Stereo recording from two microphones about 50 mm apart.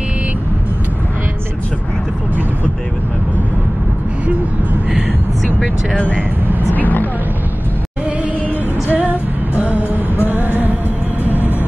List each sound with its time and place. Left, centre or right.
5.9 s speech: left
6.7 s vehicle: left
8.9 s music: right